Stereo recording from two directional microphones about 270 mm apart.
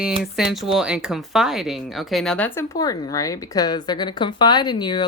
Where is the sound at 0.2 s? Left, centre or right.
Centre.